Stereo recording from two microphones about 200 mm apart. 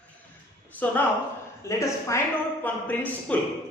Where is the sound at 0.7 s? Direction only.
10° left (ahead or behind).